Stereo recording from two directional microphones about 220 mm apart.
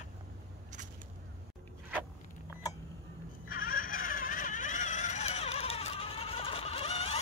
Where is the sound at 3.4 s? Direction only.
40° left (ahead or behind).